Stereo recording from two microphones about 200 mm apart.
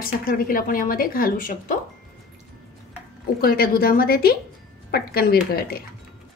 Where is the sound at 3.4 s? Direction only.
50° left (ahead or behind).